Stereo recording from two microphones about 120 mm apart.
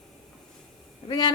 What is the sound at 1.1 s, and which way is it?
Speech, 35° left (ahead or behind).